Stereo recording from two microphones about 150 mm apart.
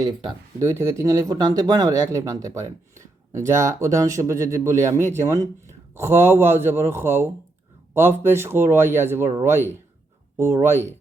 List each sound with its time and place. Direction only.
0.6 s speech: 15° right (ahead or behind)